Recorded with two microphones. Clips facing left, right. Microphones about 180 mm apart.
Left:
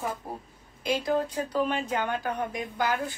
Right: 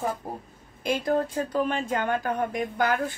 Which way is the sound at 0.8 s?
50° right (ahead or behind).